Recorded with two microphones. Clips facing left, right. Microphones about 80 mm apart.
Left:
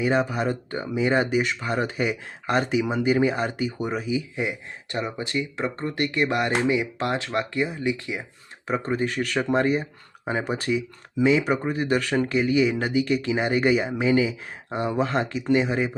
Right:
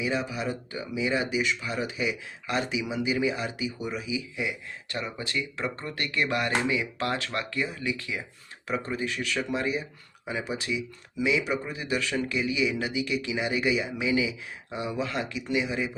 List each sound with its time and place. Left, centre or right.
0.0 s speech: left
8.6 s speech: left